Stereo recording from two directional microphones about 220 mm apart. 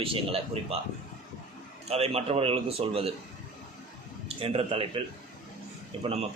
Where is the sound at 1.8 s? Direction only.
30° right (ahead or behind).